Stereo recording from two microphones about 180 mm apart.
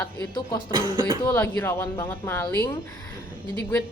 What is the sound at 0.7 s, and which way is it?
Speech, 25° right (ahead or behind).